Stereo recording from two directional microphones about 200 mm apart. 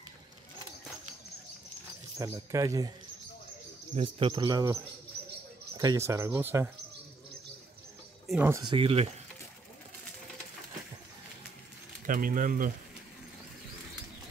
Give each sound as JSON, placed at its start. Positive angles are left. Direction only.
{"t": 2.1, "sound": "speech", "side_deg": -15}
{"t": 3.9, "sound": "speech", "side_deg": -25}
{"t": 5.8, "sound": "speech", "side_deg": -15}
{"t": 8.3, "sound": "speech", "side_deg": -10}
{"t": 12.1, "sound": "speech", "side_deg": -45}